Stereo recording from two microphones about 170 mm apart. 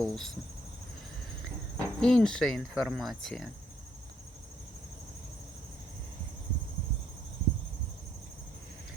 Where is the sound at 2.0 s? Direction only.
5° left (ahead or behind).